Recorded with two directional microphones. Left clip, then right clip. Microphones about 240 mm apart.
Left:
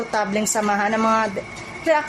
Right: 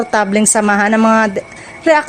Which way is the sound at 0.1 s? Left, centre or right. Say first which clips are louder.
Right 8 dB; right.